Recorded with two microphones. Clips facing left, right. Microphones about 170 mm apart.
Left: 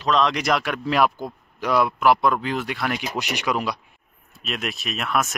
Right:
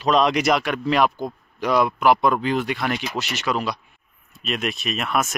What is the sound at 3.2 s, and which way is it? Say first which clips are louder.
Speech: even; 15° left (ahead or behind).